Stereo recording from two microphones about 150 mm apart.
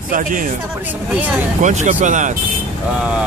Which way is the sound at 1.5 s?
55° right (ahead or behind).